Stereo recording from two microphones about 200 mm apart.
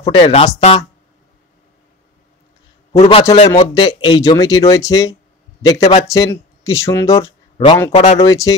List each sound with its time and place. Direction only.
0.0 s speech: 30° left (ahead or behind)
2.9 s a man's voice: 30° left (ahead or behind)
7.9 s speech: 35° left (ahead or behind)
8.2 s speech: 15° left (ahead or behind)